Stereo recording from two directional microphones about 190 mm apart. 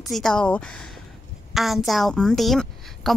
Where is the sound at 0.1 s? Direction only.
5° left (ahead or behind).